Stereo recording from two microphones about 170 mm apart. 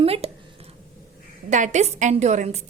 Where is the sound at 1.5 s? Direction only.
45° right (ahead or behind).